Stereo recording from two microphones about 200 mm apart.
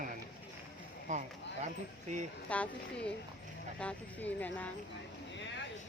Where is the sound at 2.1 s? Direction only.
35° right (ahead or behind).